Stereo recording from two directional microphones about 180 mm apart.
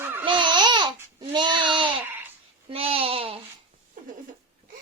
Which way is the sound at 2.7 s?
30° right (ahead or behind).